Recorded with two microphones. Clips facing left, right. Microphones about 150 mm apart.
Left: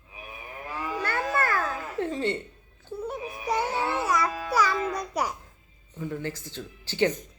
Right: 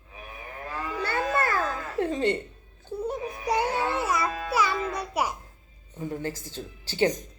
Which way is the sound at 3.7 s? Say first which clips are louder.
Even; 10° left (ahead or behind).